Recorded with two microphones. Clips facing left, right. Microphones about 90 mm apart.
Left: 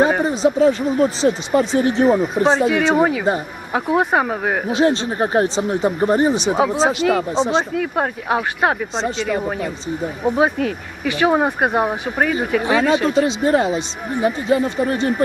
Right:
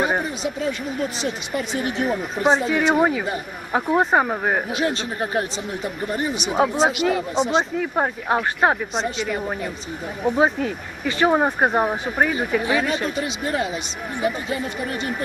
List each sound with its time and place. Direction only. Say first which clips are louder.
0.2 s speech: left 10 dB; 35° left (ahead or behind)
2.5 s speech: left 1 dB; centre (ahead or behind)
4.7 s speech: left 7 dB; 30° left (ahead or behind)
6.6 s speech: right 2 dB; 5° right (ahead or behind)
7.3 s speech: left 2 dB; 30° left (ahead or behind)
7.8 s speech: left 2 dB; centre (ahead or behind)
9.0 s speech: left 3 dB; 30° left (ahead or behind)
9.2 s speech: left 4 dB; 5° right (ahead or behind)
10.2 s speech: left 2 dB; 15° left (ahead or behind)
10.6 s speech: left 3 dB; 10° right (ahead or behind)
11.2 s speech: left 1 dB; 5° left (ahead or behind)
12.6 s speech: left 6 dB; 30° left (ahead or behind)